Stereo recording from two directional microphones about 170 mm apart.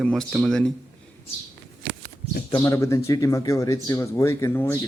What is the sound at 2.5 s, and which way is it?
Speech, 20° left (ahead or behind).